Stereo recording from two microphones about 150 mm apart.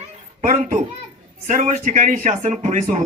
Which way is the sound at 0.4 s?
55° right (ahead or behind).